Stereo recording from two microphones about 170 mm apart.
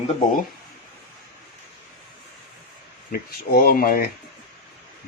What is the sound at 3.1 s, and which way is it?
Speech, 60° left (ahead or behind).